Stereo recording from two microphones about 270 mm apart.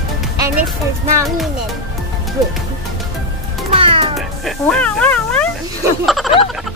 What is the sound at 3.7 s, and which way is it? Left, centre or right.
Meow, centre.